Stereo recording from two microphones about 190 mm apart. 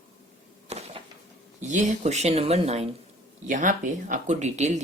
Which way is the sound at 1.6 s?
40° right (ahead or behind).